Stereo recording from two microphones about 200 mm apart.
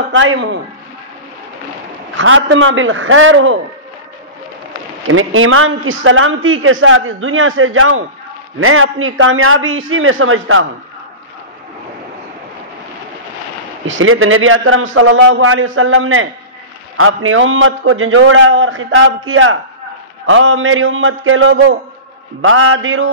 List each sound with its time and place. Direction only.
0.1 s a man's voice: 75° right (ahead or behind)
2.1 s a man's voice: 75° right (ahead or behind)
5.0 s a man's voice: 90° right
13.8 s a man's voice: 80° right
22.4 s a man's voice: 90° right